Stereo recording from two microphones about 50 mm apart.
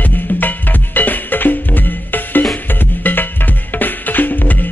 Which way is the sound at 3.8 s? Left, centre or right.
Left.